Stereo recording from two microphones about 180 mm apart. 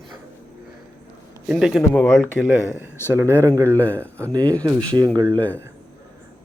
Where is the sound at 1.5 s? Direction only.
Centre (ahead or behind).